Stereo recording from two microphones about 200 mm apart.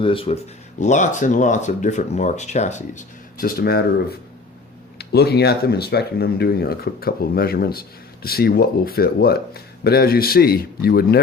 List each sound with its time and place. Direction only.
0.0 s speech: 25° left (ahead or behind)
0.8 s speech: 35° left (ahead or behind)
4.9 s speech: 55° left (ahead or behind)